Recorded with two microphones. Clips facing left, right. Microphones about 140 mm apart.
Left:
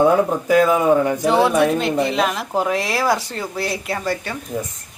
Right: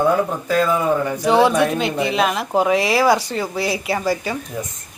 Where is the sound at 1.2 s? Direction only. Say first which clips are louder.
Even; centre (ahead or behind).